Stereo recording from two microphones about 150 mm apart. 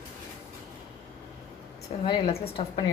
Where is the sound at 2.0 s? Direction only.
35° left (ahead or behind).